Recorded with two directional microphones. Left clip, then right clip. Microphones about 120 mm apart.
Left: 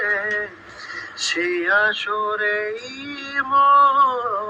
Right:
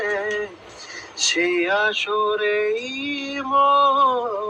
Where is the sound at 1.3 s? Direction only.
15° right (ahead or behind).